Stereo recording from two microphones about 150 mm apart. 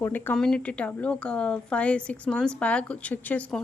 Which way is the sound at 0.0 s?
10° left (ahead or behind).